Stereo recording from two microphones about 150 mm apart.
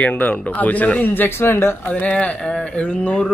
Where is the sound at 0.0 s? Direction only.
10° left (ahead or behind).